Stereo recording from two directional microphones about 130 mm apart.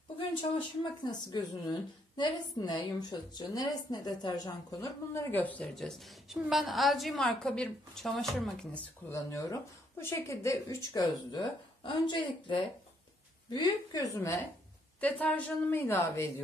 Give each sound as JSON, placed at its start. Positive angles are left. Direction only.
{"t": 0.2, "sound": "speech", "side_deg": 40}
{"t": 5.3, "sound": "a woman's voice", "side_deg": 10}
{"t": 5.8, "sound": "a woman's voice", "side_deg": 0}
{"t": 9.1, "sound": "speech", "side_deg": 25}
{"t": 14.1, "sound": "a woman's voice", "side_deg": 20}